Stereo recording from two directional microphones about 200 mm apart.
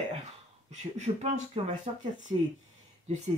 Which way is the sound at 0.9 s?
35° right (ahead or behind).